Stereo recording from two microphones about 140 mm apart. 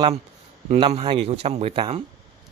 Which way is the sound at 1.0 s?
40° right (ahead or behind).